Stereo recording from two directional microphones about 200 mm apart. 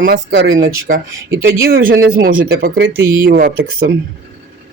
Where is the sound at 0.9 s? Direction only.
40° right (ahead or behind).